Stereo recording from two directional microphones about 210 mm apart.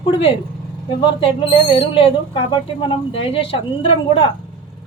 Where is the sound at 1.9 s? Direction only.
25° left (ahead or behind).